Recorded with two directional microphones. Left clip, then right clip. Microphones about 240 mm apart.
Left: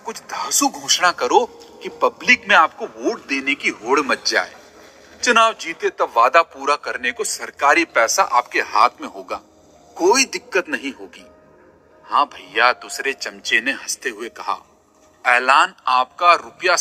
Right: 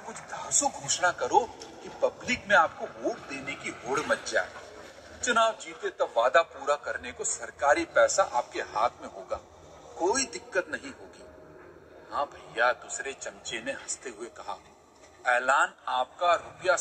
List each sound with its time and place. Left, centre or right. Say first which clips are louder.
0.3 s a man's voice: left 9 dB; left
12.1 s a man's voice: left 14 dB; left